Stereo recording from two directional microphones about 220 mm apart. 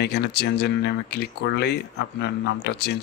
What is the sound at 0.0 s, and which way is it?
Speech, 50° left (ahead or behind).